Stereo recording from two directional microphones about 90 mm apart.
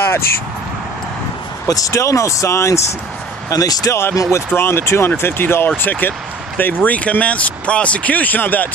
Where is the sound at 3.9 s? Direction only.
30° left (ahead or behind).